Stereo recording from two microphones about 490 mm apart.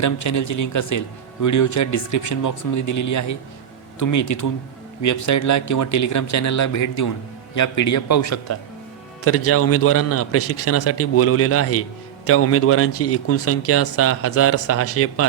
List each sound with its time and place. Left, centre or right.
0.0 s a man's voice: left